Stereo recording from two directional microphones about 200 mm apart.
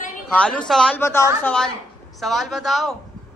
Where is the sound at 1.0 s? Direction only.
15° left (ahead or behind).